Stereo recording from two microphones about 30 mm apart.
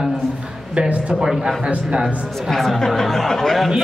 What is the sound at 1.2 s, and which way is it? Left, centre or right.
Speech, centre.